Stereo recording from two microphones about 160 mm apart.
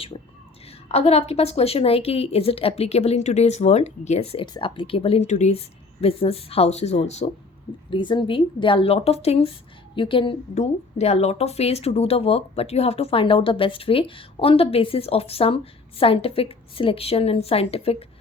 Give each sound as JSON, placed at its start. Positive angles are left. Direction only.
{"t": 0.7, "sound": "speech", "side_deg": 40}
{"t": 4.4, "sound": "speech", "side_deg": 30}
{"t": 7.9, "sound": "speech", "side_deg": 30}